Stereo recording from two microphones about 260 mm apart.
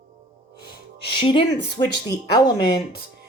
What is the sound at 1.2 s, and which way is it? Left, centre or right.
Speech, centre.